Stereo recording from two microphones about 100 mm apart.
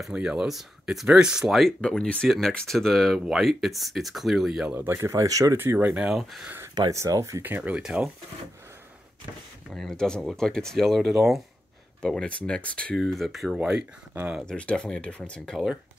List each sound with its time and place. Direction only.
0.0 s speech: 10° right (ahead or behind)
1.8 s speech: 10° left (ahead or behind); by 4.7 s 5° right (ahead or behind)
4.7 s speech: 25° right (ahead or behind)
5.6 s speech: 20° right (ahead or behind)
5.9 s speech: 5° right (ahead or behind)
6.9 s speech: 35° right (ahead or behind)
7.4 s speech: 15° right (ahead or behind)
9.8 s speech: 5° left (ahead or behind)
13.6 s speech: 15° right (ahead or behind)
14.4 s speech: 10° left (ahead or behind)